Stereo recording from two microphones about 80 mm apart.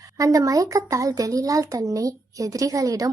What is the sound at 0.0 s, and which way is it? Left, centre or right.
A woman's voice, right.